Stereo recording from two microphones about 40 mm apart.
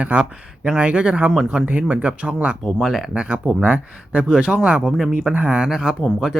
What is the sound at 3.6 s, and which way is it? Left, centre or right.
Speech, right.